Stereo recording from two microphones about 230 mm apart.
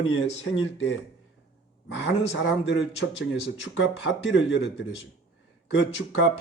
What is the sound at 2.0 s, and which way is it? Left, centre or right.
Speech, left.